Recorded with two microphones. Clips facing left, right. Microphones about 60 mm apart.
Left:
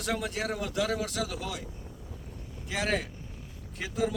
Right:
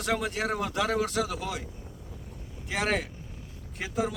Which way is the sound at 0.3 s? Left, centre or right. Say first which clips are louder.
Right 2 dB; right.